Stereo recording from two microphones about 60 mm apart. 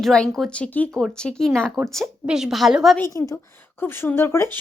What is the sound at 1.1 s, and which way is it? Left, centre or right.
A woman's voice, centre.